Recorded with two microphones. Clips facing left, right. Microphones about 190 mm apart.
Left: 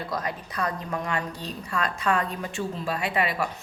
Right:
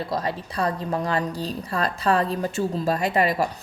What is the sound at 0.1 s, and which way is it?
A woman's voice, 30° right (ahead or behind).